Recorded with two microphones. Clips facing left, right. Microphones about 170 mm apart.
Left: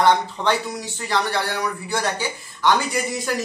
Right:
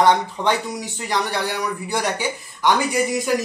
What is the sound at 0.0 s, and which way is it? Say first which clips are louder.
Speech: right 1 dB; 15° right (ahead or behind).